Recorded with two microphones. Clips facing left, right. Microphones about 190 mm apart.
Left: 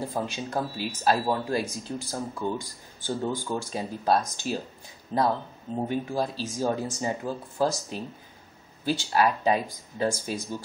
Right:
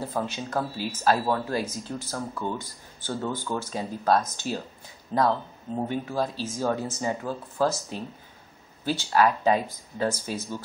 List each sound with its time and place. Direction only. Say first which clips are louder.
0.0 s speech: even; 10° left (ahead or behind)
5.9 s speech: left 1 dB; 15° left (ahead or behind)
8.8 s speech: right 1 dB; 15° left (ahead or behind)